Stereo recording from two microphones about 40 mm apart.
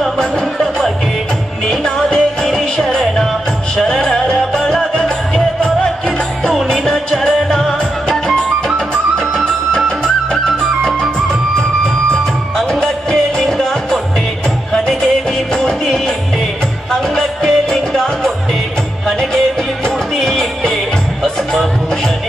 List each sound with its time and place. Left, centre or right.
0.0 s music: centre
6.5 s music: centre
10.3 s music: centre
12.8 s music: centre
15.5 s music: centre
20.2 s music: centre